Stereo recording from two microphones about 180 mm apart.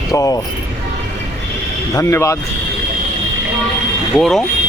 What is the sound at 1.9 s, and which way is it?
Speech, 15° left (ahead or behind).